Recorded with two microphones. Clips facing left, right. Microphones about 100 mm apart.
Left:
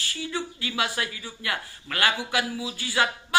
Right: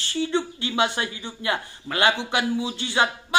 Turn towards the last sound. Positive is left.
turn(degrees=-25)  # may be behind; listen again after turning